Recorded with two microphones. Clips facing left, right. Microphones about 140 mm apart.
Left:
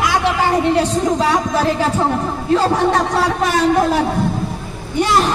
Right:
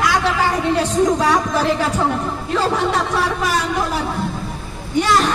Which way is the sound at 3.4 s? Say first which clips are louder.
Left 6 dB; 50° left (ahead or behind).